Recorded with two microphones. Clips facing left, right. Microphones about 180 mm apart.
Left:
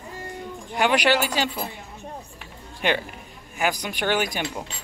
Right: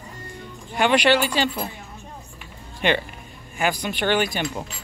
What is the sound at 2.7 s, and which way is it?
Speech, 5° left (ahead or behind).